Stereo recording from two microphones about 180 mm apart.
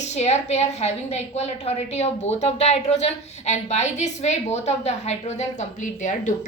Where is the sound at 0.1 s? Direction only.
35° left (ahead or behind).